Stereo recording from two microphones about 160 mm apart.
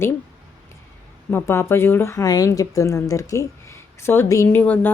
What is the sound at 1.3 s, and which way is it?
A woman's voice, 15° left (ahead or behind).